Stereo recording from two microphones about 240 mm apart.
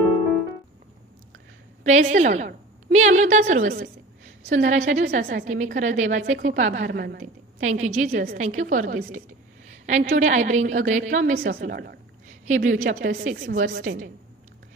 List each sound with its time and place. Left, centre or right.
1.8 s a woman's voice: right